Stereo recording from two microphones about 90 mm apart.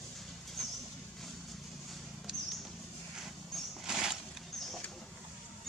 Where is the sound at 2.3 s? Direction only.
10° right (ahead or behind).